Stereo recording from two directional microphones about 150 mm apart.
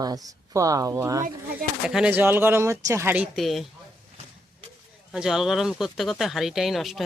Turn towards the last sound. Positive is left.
turn(degrees=0)  # may be behind; listen again after turning